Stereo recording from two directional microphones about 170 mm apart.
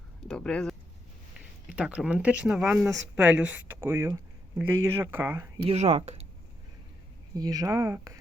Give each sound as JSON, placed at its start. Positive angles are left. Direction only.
{"t": 0.3, "sound": "speech", "side_deg": 5}
{"t": 5.5, "sound": "speech", "side_deg": -40}
{"t": 7.3, "sound": "speech", "side_deg": -20}